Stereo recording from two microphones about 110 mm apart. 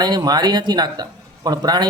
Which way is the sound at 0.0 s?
40° right (ahead or behind).